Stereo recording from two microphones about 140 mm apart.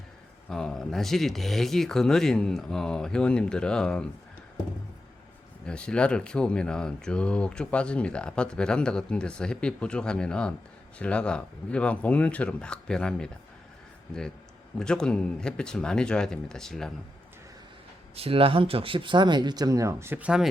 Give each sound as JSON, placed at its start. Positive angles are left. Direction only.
{"t": 0.5, "sound": "speech", "side_deg": 5}
{"t": 5.6, "sound": "speech", "side_deg": 5}
{"t": 14.8, "sound": "speech", "side_deg": 5}
{"t": 18.2, "sound": "speech", "side_deg": -40}